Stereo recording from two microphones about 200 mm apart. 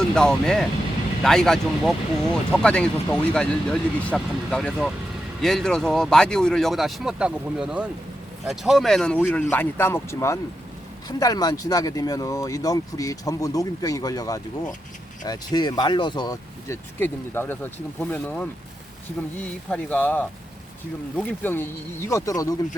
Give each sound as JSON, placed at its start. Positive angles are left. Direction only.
{"t": 0.1, "sound": "speech", "side_deg": 5}